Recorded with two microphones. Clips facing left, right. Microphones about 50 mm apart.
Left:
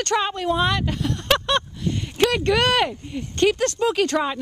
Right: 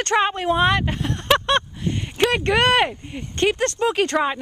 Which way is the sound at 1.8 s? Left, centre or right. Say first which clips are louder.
Even; centre.